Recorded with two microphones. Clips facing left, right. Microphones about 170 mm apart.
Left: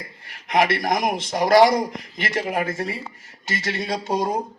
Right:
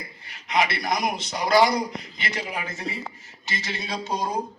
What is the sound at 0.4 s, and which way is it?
Speech, 50° left (ahead or behind).